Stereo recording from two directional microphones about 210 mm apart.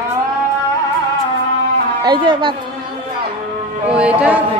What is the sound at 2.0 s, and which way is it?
Speech, 20° right (ahead or behind).